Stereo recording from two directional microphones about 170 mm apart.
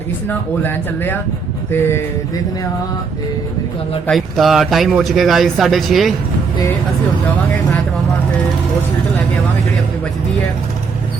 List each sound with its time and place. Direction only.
0.3 s speech: 10° left (ahead or behind)
4.0 s speech: centre (ahead or behind)